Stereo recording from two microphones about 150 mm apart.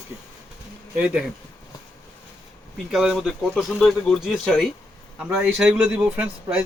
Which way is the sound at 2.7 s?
Centre (ahead or behind).